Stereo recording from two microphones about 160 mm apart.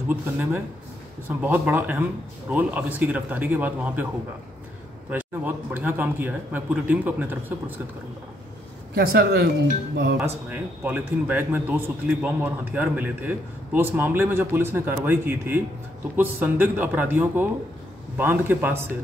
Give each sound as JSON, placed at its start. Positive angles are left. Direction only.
{"t": 0.1, "sound": "a man's voice", "side_deg": -10}
{"t": 5.1, "sound": "a man's voice", "side_deg": -10}
{"t": 8.9, "sound": "speech", "side_deg": -70}
{"t": 10.2, "sound": "a man's voice", "side_deg": -10}